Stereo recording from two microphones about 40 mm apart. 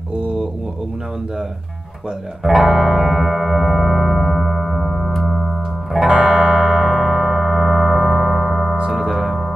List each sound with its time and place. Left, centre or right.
0.2 s mantra: right
2.4 s music: centre
6.0 s music: right
6.3 s a sound: centre
8.9 s music: centre